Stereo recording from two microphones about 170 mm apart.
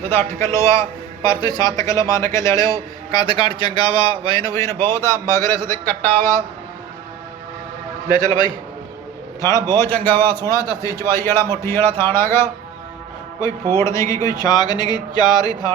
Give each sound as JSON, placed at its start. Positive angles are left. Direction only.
{"t": 0.1, "sound": "a man's voice", "side_deg": 15}
{"t": 8.1, "sound": "a man's voice", "side_deg": 25}
{"t": 9.6, "sound": "a man's voice", "side_deg": 15}